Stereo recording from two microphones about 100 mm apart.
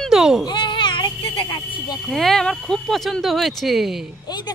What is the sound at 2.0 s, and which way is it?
Speech, 5° left (ahead or behind).